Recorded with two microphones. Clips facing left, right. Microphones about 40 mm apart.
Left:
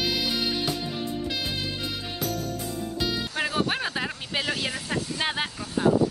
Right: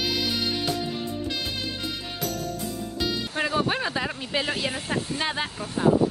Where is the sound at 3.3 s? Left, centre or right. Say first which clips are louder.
Right 4 dB; centre.